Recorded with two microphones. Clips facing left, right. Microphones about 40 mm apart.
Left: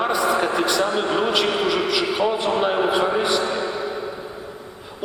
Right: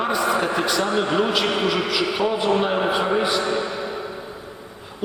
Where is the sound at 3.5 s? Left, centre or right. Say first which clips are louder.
Even; left.